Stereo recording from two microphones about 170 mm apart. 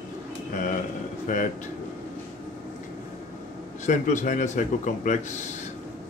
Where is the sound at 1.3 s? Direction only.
50° left (ahead or behind).